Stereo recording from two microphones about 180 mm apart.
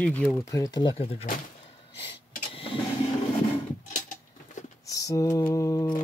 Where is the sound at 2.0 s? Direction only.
30° left (ahead or behind).